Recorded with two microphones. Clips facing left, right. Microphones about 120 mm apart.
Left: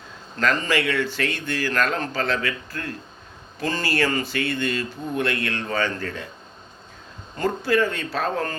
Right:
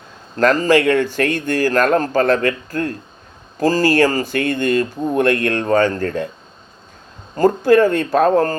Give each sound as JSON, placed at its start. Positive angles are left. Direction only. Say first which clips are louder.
{"t": 0.3, "sound": "speech", "louder": "right 9 dB", "side_deg": -40}
{"t": 7.3, "sound": "speech", "louder": "right 9 dB", "side_deg": -45}